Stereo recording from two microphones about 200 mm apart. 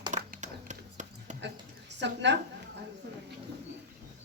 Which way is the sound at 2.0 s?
60° right (ahead or behind).